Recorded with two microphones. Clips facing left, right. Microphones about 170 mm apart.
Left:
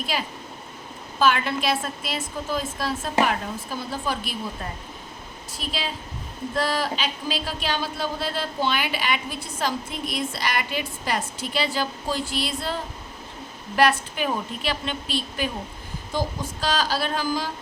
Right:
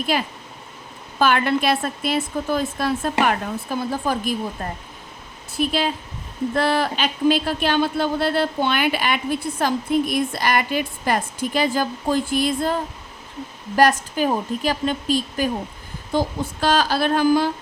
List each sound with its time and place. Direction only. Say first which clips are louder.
1.2 s speech: right 3 dB; 55° right (ahead or behind)
5.5 s a woman's voice: right 10 dB; 55° right (ahead or behind)
16.1 s speech: right 6 dB; 55° right (ahead or behind)